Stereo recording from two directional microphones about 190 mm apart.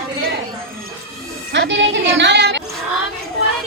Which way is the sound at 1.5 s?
70° right (ahead or behind).